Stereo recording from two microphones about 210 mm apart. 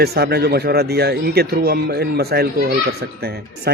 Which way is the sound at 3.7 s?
50° right (ahead or behind).